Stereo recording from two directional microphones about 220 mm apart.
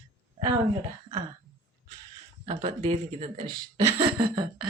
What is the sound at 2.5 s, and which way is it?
Speech, 30° right (ahead or behind).